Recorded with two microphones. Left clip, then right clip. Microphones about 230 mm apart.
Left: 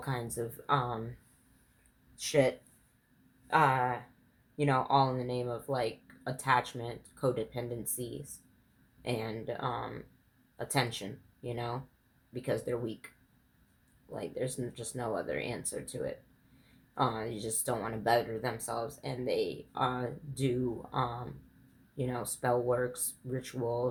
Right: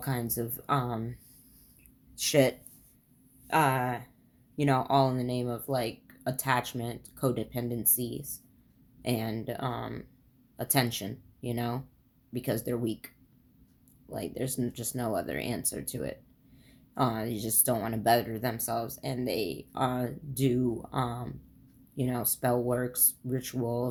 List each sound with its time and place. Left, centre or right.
0.0 s speech: right
2.1 s speech: right
3.4 s a sound: right
4.5 s speech: right
14.1 s speech: right